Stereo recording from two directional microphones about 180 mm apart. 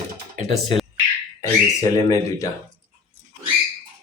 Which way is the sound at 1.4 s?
20° left (ahead or behind).